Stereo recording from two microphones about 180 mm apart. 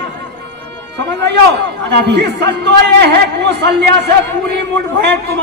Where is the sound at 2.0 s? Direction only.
70° right (ahead or behind).